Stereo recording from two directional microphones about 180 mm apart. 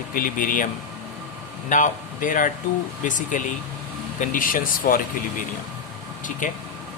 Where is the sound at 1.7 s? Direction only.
45° left (ahead or behind).